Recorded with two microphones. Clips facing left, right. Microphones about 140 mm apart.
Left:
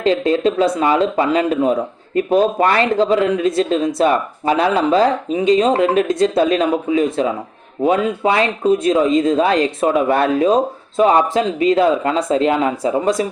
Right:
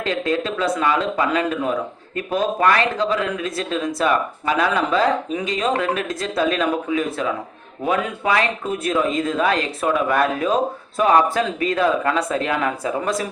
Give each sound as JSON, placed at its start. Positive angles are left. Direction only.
{"t": 0.0, "sound": "speech", "side_deg": 30}